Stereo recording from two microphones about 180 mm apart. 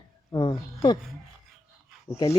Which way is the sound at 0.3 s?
25° left (ahead or behind).